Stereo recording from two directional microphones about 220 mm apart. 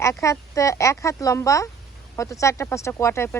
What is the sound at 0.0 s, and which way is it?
Speech, 15° left (ahead or behind).